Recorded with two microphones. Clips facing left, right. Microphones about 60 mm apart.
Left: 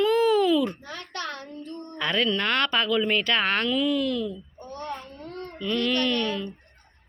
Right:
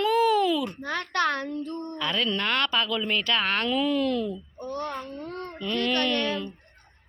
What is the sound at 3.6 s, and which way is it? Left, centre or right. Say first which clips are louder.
Speech: even; right.